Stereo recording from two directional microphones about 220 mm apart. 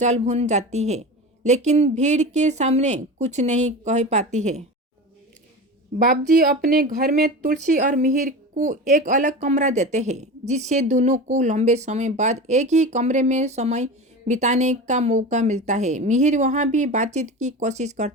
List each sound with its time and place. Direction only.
0.0 s speech: 30° right (ahead or behind)
5.9 s speech: 35° right (ahead or behind)